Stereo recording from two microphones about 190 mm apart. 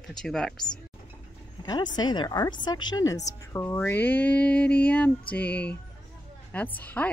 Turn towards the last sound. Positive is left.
turn(degrees=10)  # may be behind; listen again after turning